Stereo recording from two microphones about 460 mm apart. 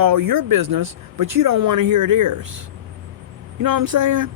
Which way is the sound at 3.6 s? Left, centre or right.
Right.